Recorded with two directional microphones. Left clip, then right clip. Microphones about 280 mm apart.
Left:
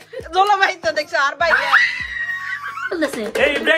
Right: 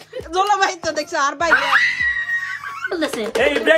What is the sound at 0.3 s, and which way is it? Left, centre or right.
A woman's voice, centre.